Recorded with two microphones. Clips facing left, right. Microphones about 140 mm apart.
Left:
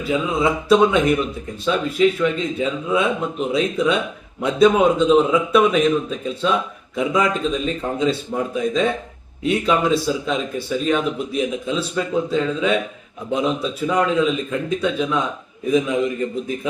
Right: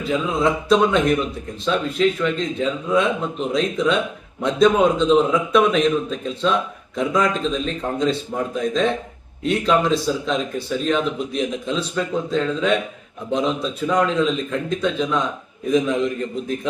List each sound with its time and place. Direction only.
0.0 s a man's voice: 5° left (ahead or behind)